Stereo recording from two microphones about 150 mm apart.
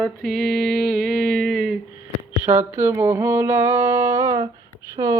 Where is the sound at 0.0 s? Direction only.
Centre (ahead or behind).